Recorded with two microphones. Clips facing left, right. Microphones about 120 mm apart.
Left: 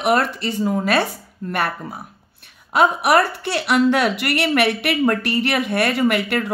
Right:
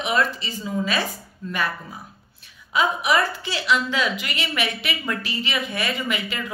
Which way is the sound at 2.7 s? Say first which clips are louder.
Left 5 dB; 65° left (ahead or behind).